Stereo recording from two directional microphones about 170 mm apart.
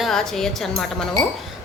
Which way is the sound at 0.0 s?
Centre (ahead or behind).